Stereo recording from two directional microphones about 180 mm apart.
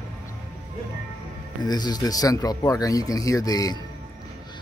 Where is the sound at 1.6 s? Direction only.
20° left (ahead or behind).